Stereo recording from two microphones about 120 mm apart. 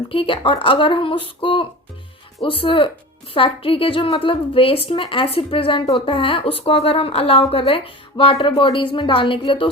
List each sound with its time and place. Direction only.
0.1 s a woman's voice: 50° left (ahead or behind)
8.4 s a woman's voice: 45° left (ahead or behind)